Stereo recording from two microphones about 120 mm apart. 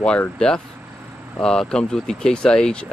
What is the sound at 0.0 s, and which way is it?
Speech, 10° left (ahead or behind).